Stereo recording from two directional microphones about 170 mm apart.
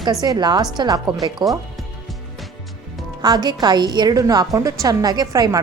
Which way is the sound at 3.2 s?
25° right (ahead or behind).